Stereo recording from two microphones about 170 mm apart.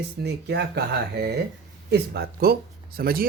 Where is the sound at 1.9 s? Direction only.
70° right (ahead or behind).